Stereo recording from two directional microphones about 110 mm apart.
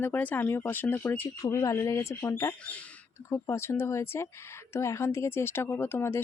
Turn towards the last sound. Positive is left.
turn(degrees=20)  # may be behind; listen again after turning